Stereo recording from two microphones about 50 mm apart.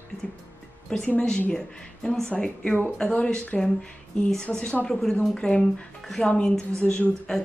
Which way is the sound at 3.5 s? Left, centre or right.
Centre.